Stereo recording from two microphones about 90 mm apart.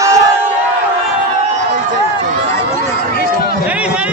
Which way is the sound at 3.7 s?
10° right (ahead or behind).